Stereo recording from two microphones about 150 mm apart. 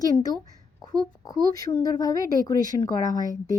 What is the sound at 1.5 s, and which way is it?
Speech, 25° left (ahead or behind).